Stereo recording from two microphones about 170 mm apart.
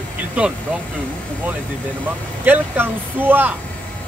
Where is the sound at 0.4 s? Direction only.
10° right (ahead or behind).